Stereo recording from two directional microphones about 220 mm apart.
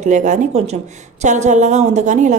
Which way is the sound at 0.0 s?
35° right (ahead or behind).